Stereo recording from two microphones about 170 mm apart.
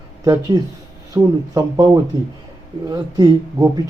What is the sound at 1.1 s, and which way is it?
A man's voice, 20° right (ahead or behind).